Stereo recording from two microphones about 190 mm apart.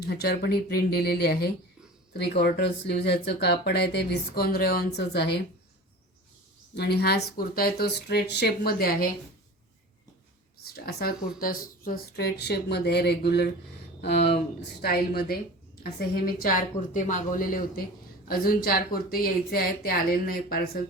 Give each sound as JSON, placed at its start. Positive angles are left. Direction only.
{"t": 0.0, "sound": "speech", "side_deg": 55}
{"t": 6.7, "sound": "speech", "side_deg": 60}
{"t": 10.6, "sound": "speech", "side_deg": 55}
{"t": 14.8, "sound": "a woman's voice", "side_deg": 55}